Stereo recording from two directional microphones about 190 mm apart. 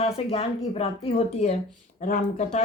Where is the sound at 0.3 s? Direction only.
30° left (ahead or behind).